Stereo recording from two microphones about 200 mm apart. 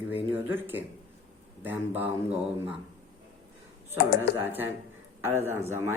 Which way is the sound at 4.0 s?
55° left (ahead or behind).